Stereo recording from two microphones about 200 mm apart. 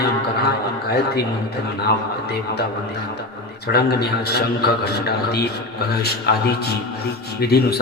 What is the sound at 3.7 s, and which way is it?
A man's voice, 50° left (ahead or behind).